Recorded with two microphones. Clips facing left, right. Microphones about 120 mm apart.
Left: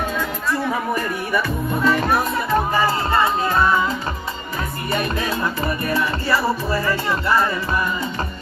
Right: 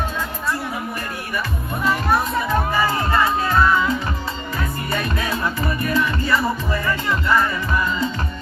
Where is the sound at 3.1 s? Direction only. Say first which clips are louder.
Even; 25° left (ahead or behind).